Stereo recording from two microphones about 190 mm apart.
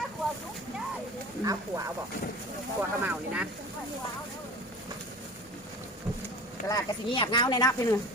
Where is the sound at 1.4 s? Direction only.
20° right (ahead or behind).